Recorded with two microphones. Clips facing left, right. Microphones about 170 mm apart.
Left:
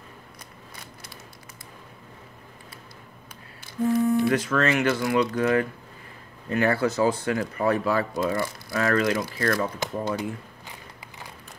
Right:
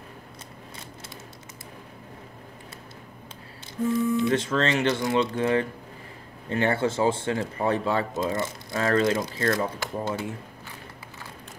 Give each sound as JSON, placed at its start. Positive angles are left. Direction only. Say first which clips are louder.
{"t": 4.2, "sound": "speech", "louder": "left 1 dB", "side_deg": -25}
{"t": 9.8, "sound": "speech", "louder": "left 2 dB", "side_deg": 15}